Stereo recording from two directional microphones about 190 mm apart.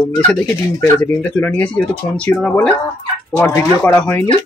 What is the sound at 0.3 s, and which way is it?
Speech, 10° left (ahead or behind).